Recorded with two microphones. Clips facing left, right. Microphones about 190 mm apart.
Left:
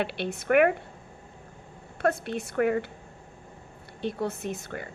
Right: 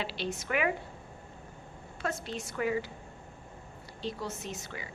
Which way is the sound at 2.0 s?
60° left (ahead or behind).